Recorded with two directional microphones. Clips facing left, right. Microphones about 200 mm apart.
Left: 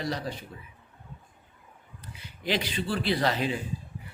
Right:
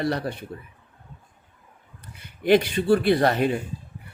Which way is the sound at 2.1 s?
55° right (ahead or behind).